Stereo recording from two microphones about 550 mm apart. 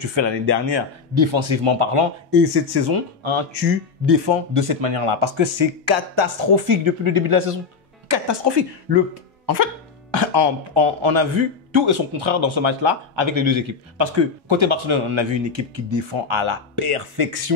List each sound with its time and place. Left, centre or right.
0.0 s a man's voice: right
2.3 s speech: right
4.6 s a man's voice: right
8.1 s speech: right
10.1 s a man's voice: right